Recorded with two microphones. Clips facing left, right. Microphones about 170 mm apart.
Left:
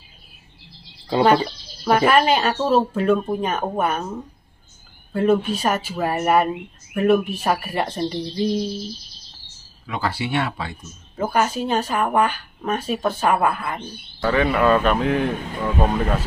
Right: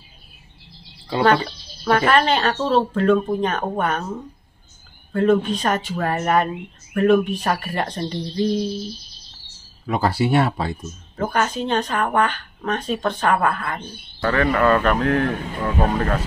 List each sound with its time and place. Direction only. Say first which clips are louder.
1.1 s speech: left 1 dB; 15° left (ahead or behind)
5.1 s speech: right 1 dB; 5° left (ahead or behind)
9.8 s speech: right 6 dB; 40° right (ahead or behind)
11.1 s speech: left 1 dB; 5° left (ahead or behind)